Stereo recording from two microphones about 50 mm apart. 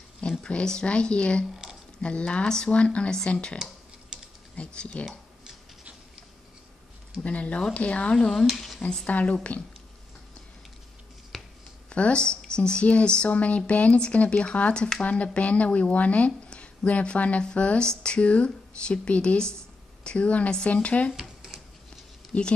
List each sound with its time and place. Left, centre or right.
0.4 s speech: centre
1.6 s a sound: centre
2.0 s speech: left
4.6 s speech: left
7.2 s speech: left
8.3 s speech: centre
9.0 s speech: left
11.3 s a sound: centre
11.9 s speech: left
21.1 s a sound: centre
22.3 s speech: centre